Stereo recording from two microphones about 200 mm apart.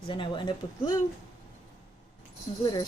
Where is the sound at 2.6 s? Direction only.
20° left (ahead or behind).